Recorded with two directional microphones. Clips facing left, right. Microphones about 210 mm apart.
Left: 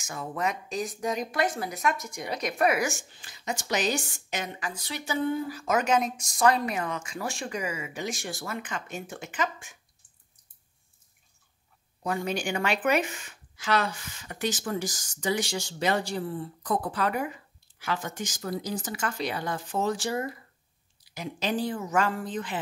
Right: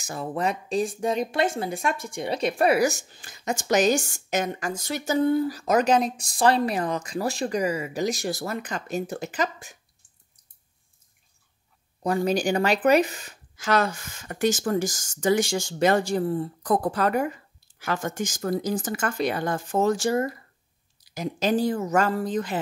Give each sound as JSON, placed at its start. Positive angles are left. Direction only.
{"t": 0.0, "sound": "speech", "side_deg": -35}
{"t": 12.0, "sound": "speech", "side_deg": -35}